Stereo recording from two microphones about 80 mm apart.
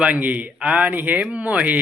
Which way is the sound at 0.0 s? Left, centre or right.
Centre.